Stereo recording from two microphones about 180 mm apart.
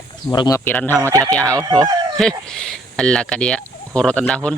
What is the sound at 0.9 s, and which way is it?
Speech, 15° right (ahead or behind).